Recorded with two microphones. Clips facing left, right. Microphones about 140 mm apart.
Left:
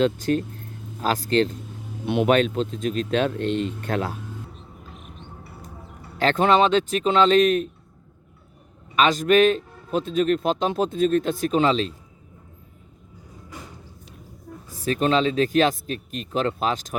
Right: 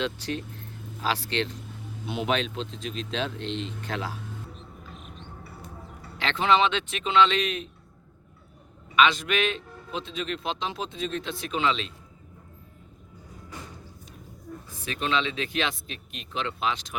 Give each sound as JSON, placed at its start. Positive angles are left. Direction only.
{"t": 0.0, "sound": "a man's voice", "side_deg": 45}
{"t": 2.0, "sound": "a man's voice", "side_deg": 55}
{"t": 6.1, "sound": "a man's voice", "side_deg": 45}
{"t": 9.0, "sound": "a man's voice", "side_deg": 40}
{"t": 14.7, "sound": "a man's voice", "side_deg": 40}